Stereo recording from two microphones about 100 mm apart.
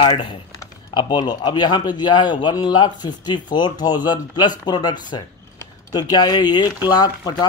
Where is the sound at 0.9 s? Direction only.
45° left (ahead or behind).